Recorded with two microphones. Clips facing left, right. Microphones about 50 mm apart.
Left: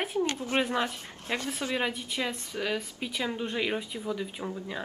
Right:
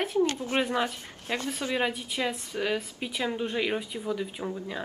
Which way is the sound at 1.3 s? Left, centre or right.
Centre.